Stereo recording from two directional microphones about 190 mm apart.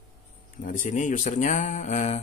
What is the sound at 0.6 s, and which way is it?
Speech, 45° left (ahead or behind).